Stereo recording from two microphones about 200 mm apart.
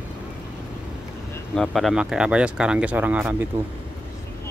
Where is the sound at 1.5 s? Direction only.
Centre (ahead or behind).